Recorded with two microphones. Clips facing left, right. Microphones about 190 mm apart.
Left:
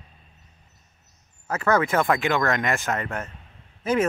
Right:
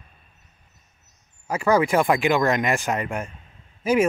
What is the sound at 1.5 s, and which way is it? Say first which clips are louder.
Speech: right 2 dB; 10° right (ahead or behind).